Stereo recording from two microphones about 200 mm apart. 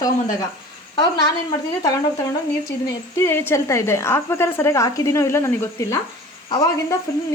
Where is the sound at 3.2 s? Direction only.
15° left (ahead or behind).